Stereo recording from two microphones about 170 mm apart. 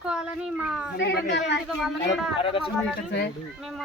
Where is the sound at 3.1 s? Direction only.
75° left (ahead or behind).